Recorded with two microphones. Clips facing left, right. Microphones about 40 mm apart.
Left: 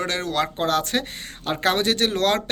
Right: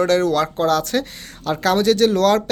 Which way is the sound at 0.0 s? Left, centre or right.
Left.